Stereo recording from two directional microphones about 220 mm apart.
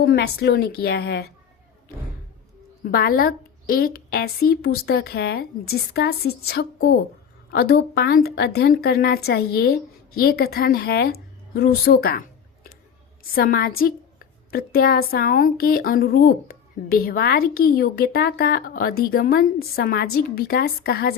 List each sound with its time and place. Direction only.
0.0 s a woman's voice: 45° left (ahead or behind)
2.9 s a woman's voice: 40° left (ahead or behind)
13.3 s a woman's voice: 40° left (ahead or behind)